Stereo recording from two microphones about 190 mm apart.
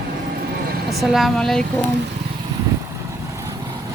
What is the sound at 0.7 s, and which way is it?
Vehicle, 55° right (ahead or behind).